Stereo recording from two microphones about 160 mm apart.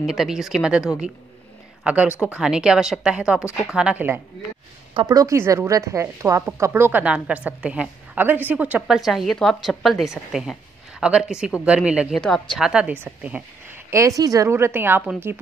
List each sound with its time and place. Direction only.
0.0 s a woman's voice: centre (ahead or behind)
5.0 s a woman's voice: 20° right (ahead or behind)